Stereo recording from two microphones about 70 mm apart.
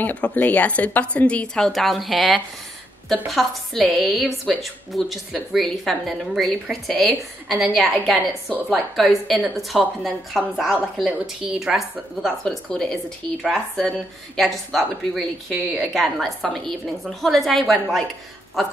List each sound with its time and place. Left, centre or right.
0.0 s a woman's voice: centre
12.4 s a woman's voice: centre